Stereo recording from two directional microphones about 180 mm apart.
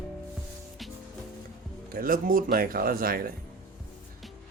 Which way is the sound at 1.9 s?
50° right (ahead or behind).